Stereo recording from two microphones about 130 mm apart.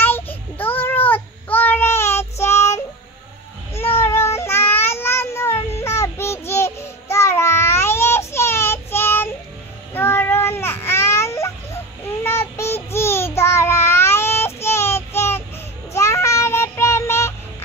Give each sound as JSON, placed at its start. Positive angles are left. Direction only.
{"t": 0.0, "sound": "child singing", "side_deg": 15}
{"t": 5.8, "sound": "babbling", "side_deg": 20}
{"t": 9.9, "sound": "a sound", "side_deg": 20}
{"t": 15.9, "sound": "child singing", "side_deg": 20}